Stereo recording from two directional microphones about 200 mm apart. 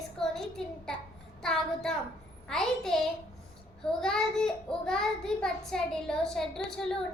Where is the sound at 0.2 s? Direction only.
Centre (ahead or behind).